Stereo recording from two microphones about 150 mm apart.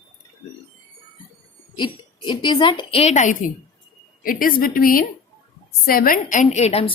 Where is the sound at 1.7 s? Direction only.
30° left (ahead or behind); by 3.3 s 50° left (ahead or behind).